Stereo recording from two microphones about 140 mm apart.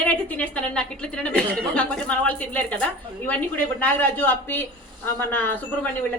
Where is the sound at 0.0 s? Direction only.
10° left (ahead or behind).